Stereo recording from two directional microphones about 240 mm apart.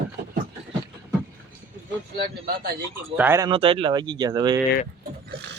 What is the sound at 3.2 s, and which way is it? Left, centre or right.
Speech, centre.